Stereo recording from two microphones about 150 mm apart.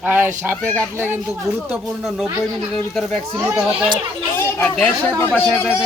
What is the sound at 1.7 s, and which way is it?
Speech, 5° right (ahead or behind).